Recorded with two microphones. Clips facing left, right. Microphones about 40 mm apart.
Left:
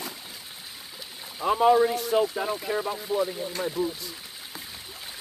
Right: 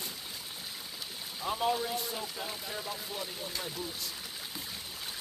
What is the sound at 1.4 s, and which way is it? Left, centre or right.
Speech, left.